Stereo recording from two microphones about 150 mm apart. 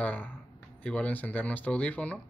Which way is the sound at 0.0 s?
10° left (ahead or behind).